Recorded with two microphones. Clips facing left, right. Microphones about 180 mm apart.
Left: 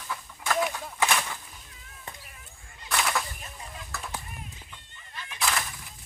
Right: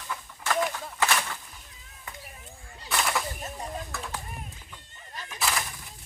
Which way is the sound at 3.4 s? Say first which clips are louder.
Right 8 dB; 40° right (ahead or behind).